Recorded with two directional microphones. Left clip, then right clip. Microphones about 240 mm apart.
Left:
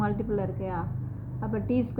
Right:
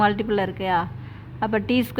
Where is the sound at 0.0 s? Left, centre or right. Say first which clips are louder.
Right 9 dB; right.